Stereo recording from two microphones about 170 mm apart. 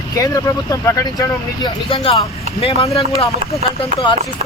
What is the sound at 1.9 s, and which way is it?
Speech, 30° left (ahead or behind).